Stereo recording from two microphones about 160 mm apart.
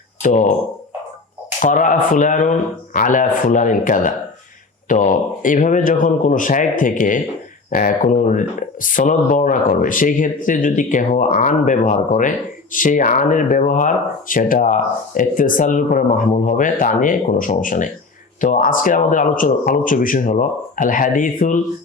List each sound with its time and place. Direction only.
0.2 s speech: 50° left (ahead or behind)
1.6 s speech: 55° left (ahead or behind)